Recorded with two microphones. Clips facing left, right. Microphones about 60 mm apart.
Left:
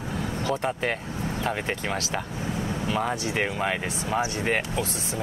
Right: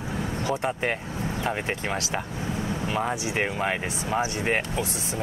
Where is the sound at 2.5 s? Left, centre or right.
Centre.